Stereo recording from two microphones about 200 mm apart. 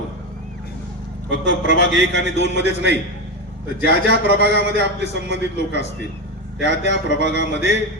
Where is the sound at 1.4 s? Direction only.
65° right (ahead or behind).